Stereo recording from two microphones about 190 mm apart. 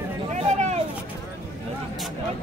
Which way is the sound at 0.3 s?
35° right (ahead or behind).